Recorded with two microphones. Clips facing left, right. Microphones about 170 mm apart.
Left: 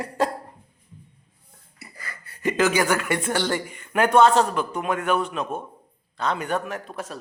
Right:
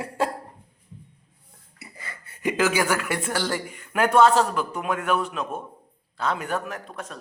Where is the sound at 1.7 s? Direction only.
20° right (ahead or behind).